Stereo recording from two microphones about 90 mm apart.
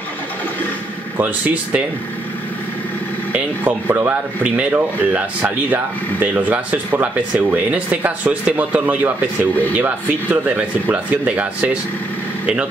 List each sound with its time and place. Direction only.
1.1 s speech: 15° right (ahead or behind)
3.3 s speech: 20° right (ahead or behind)